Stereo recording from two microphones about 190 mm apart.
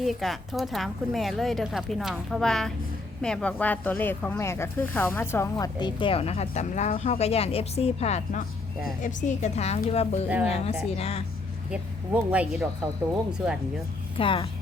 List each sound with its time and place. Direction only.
0.0 s a woman's voice: centre (ahead or behind); by 10.2 s 35° left (ahead or behind)
10.2 s speech: 5° right (ahead or behind)
10.5 s a woman's voice: 30° left (ahead or behind)
11.7 s speech: 5° right (ahead or behind)
14.2 s speech: 25° left (ahead or behind)